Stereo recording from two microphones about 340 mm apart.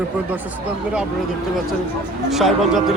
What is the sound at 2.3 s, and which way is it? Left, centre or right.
Speech, centre.